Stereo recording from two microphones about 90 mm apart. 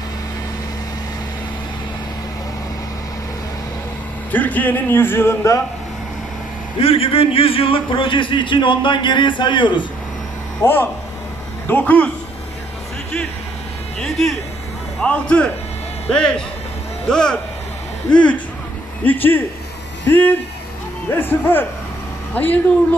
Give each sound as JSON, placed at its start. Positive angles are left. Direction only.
{"t": 4.3, "sound": "speech", "side_deg": 20}
{"t": 6.8, "sound": "a man's voice", "side_deg": 90}
{"t": 10.6, "sound": "speech", "side_deg": 25}
{"t": 13.9, "sound": "a man's voice", "side_deg": 5}